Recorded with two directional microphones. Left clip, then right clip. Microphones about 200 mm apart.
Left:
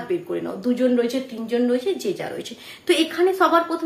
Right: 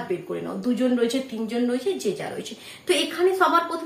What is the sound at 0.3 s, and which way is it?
A woman's voice, 40° left (ahead or behind).